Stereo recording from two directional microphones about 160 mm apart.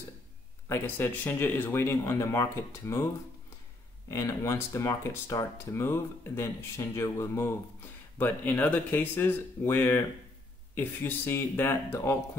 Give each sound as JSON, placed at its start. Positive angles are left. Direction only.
{"t": 0.7, "sound": "speech", "side_deg": 15}
{"t": 4.1, "sound": "speech", "side_deg": 20}